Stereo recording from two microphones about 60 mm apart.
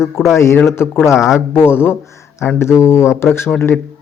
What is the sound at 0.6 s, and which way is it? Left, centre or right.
Speech, left.